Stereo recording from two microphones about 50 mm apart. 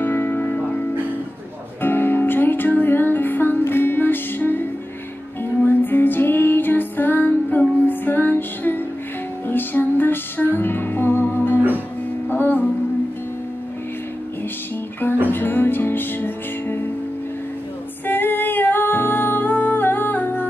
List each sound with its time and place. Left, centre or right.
0.0 s music: left
1.8 s music: left
5.7 s music: left
15.3 s music: left
18.0 s music: left